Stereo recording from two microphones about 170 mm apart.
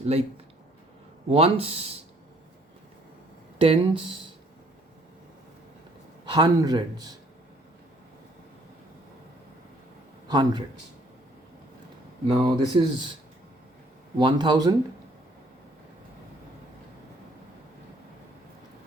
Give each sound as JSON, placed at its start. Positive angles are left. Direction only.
{"t": 0.0, "sound": "speech", "side_deg": -35}
{"t": 1.3, "sound": "speech", "side_deg": -35}
{"t": 3.6, "sound": "speech", "side_deg": -30}
{"t": 6.2, "sound": "a man's voice", "side_deg": -25}
{"t": 10.2, "sound": "speech", "side_deg": -25}
{"t": 12.3, "sound": "a man's voice", "side_deg": -25}
{"t": 14.2, "sound": "a man's voice", "side_deg": -25}